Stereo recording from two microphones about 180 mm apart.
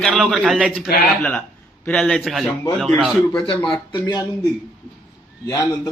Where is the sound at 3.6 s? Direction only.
25° left (ahead or behind).